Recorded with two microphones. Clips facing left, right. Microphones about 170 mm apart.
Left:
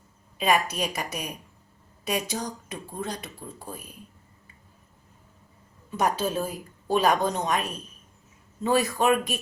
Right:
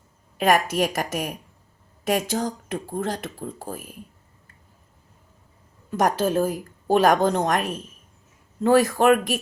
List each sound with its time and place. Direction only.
0.5 s a woman's voice: 50° right (ahead or behind)
5.9 s a woman's voice: 50° right (ahead or behind)